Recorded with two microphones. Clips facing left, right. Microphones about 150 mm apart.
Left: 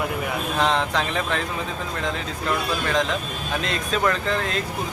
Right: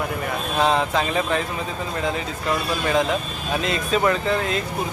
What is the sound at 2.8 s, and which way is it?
Speech, 5° right (ahead or behind).